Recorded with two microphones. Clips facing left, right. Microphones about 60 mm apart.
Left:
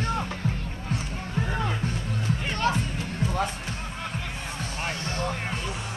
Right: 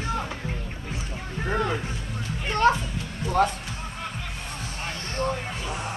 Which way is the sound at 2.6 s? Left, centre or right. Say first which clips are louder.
Right 6 dB; right.